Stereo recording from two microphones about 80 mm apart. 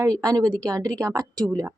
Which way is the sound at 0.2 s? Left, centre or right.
Right.